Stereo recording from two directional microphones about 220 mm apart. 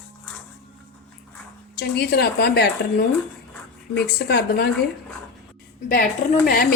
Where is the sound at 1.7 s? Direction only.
45° left (ahead or behind).